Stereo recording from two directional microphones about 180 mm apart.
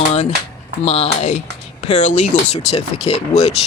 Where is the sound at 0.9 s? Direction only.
35° left (ahead or behind).